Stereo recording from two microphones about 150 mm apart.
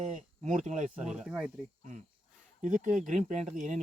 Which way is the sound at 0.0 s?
55° right (ahead or behind).